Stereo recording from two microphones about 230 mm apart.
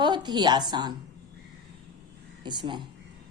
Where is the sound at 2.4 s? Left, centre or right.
Centre.